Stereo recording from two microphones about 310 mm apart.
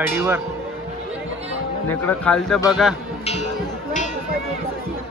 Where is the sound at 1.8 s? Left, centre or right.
Centre.